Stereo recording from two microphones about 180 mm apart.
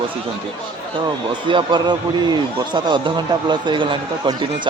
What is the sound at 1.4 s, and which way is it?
A man's voice, 25° right (ahead or behind).